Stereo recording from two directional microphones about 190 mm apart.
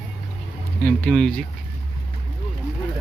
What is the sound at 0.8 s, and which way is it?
Speech, 5° left (ahead or behind).